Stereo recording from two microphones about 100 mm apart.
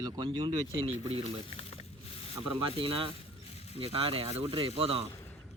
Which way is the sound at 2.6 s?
55° right (ahead or behind).